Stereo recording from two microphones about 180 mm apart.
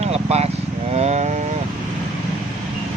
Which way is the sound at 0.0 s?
35° right (ahead or behind).